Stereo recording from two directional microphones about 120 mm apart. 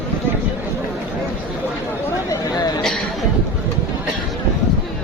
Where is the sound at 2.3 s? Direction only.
35° left (ahead or behind).